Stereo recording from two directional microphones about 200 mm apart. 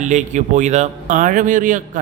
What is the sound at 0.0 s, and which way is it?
A man's voice, 40° right (ahead or behind).